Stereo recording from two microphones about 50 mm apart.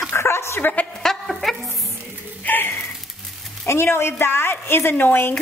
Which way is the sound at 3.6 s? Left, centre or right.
Left.